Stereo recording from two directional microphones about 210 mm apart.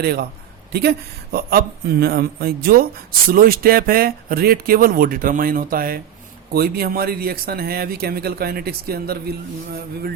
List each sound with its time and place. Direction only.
0.0 s speech: 50° right (ahead or behind)